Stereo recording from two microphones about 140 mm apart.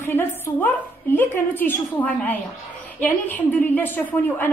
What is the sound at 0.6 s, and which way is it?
A woman's voice, 15° left (ahead or behind).